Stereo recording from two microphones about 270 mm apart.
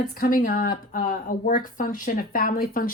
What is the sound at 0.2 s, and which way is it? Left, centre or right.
Speech, left.